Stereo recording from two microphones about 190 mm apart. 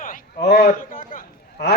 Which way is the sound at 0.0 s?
50° left (ahead or behind).